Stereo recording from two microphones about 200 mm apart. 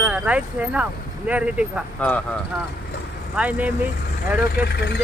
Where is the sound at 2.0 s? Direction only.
5° left (ahead or behind).